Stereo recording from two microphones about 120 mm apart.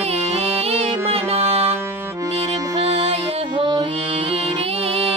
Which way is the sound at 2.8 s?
55° right (ahead or behind).